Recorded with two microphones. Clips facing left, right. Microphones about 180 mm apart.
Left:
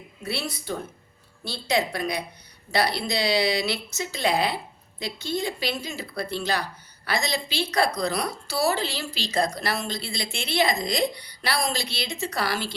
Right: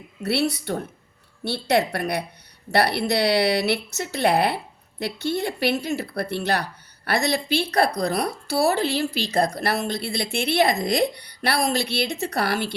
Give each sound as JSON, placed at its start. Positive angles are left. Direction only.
{"t": 0.2, "sound": "speech", "side_deg": -70}